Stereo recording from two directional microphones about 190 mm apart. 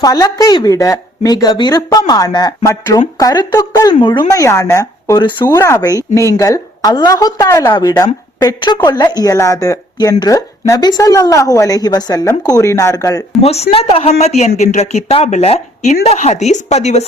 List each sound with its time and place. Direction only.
0.0 s speech: 20° left (ahead or behind)
13.4 s speech: 35° left (ahead or behind)